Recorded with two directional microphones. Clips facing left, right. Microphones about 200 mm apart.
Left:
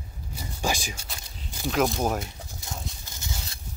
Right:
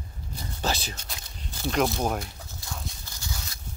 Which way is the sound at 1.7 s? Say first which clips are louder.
Left 1 dB; centre (ahead or behind).